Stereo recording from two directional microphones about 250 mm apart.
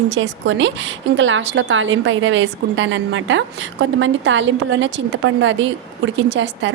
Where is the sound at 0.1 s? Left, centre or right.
Right.